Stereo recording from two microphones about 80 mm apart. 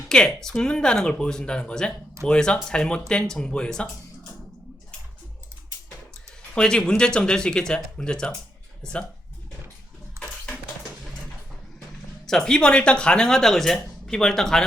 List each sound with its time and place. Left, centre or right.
0.1 s speech: centre
6.5 s speech: centre
10.2 s a sound: right
12.2 s speech: centre